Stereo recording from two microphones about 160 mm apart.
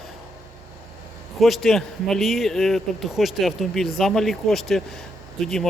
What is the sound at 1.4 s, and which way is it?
A man's voice, centre (ahead or behind).